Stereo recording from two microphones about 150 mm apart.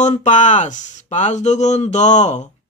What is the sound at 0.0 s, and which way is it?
Speech, 55° left (ahead or behind).